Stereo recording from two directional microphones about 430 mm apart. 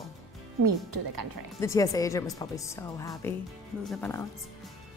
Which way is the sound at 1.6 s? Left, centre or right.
Centre.